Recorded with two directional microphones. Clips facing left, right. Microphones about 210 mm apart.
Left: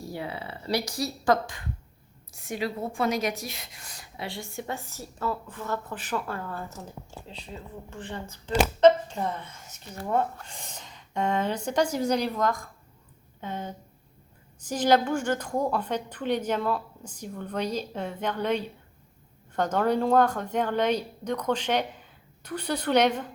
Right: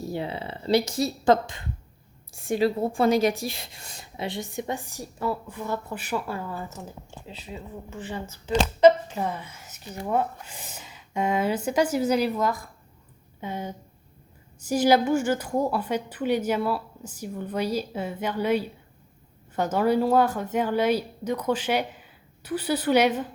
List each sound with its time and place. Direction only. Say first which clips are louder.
0.0 s a woman's voice: right 4 dB; 25° right (ahead or behind); by 23.3 s 5° right (ahead or behind)